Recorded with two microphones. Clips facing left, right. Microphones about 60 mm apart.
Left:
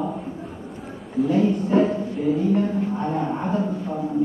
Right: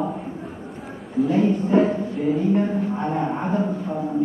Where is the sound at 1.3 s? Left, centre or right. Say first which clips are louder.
Even; right.